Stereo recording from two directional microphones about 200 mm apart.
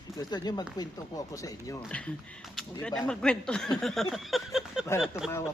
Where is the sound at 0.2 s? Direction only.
20° left (ahead or behind).